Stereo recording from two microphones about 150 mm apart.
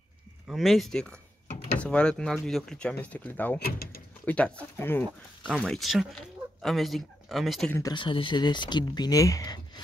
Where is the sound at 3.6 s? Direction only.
80° left.